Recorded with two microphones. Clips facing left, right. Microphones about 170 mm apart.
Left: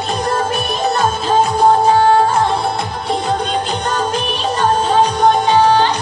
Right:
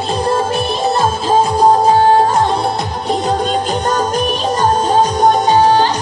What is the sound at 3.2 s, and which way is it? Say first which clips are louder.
Music: right 3 dB; 40° right (ahead or behind).